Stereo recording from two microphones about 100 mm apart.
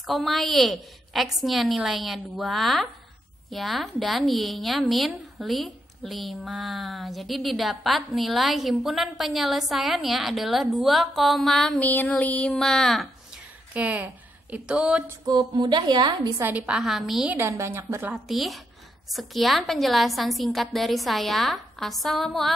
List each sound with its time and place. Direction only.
0.0 s a woman's voice: centre (ahead or behind)
11.8 s speech: 15° left (ahead or behind)
13.7 s a woman's voice: 15° right (ahead or behind)
15.2 s a woman's voice: 50° right (ahead or behind)
16.4 s a woman's voice: 10° right (ahead or behind)
17.4 s a woman's voice: 25° right (ahead or behind)
18.1 s a woman's voice: centre (ahead or behind)